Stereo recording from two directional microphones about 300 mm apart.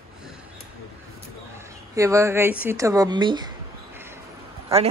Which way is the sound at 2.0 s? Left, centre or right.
Centre.